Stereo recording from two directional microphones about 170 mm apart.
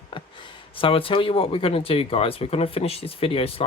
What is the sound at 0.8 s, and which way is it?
Speech, 30° left (ahead or behind).